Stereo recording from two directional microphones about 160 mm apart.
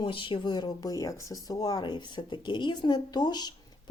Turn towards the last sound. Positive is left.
turn(degrees=25)  # may be behind; listen again after turning